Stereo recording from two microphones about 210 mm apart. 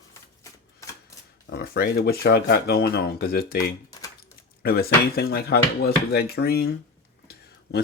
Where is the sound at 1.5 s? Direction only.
50° left (ahead or behind).